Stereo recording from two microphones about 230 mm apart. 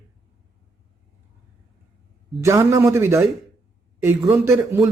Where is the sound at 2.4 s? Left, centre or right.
Centre.